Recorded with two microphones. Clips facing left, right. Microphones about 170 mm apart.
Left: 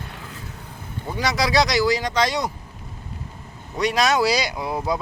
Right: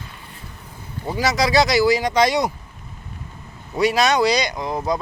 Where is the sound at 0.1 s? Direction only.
90° left.